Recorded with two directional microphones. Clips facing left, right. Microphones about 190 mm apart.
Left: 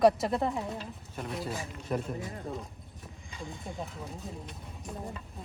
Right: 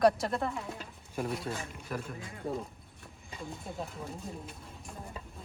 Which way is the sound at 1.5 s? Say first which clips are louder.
Left 4 dB; 20° left (ahead or behind).